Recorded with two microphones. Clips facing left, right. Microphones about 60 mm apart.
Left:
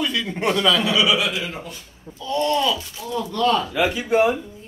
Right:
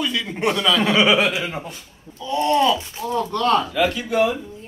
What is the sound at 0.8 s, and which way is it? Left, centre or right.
A man's voice, right.